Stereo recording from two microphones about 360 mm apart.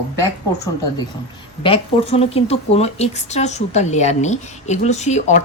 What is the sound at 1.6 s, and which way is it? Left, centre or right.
Speech, centre.